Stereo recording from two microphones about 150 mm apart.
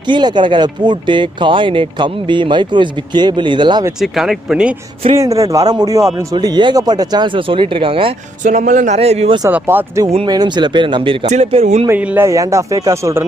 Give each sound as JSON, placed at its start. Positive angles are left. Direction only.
{"t": 0.0, "sound": "speech", "side_deg": -30}
{"t": 4.0, "sound": "speech", "side_deg": 0}
{"t": 5.1, "sound": "speech", "side_deg": -20}
{"t": 8.5, "sound": "speech", "side_deg": -55}
{"t": 9.5, "sound": "speech", "side_deg": -15}
{"t": 10.2, "sound": "speech", "side_deg": -30}
{"t": 11.2, "sound": "speech", "side_deg": -50}
{"t": 11.9, "sound": "speech", "side_deg": -10}